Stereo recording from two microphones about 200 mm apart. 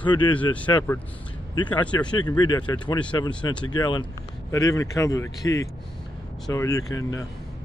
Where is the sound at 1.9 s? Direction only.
20° left (ahead or behind).